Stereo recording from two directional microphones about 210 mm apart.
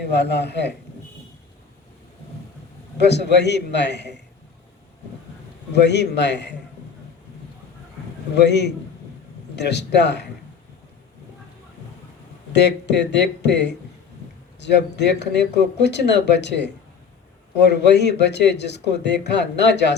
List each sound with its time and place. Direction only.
0.0 s speech: 55° left (ahead or behind)
3.0 s speech: 55° left (ahead or behind)
5.7 s a man's voice: 55° left (ahead or behind)
8.4 s speech: 55° left (ahead or behind)
12.5 s speech: 55° left (ahead or behind)